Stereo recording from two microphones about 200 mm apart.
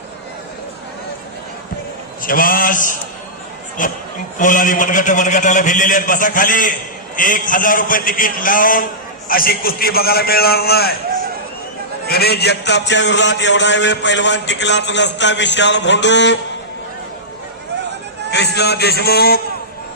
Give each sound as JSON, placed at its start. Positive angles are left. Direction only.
{"t": 2.2, "sound": "a man's voice", "side_deg": 45}
{"t": 12.0, "sound": "a man's voice", "side_deg": 50}
{"t": 18.3, "sound": "a man's voice", "side_deg": 55}